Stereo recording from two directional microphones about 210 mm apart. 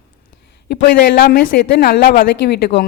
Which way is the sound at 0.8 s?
50° left (ahead or behind).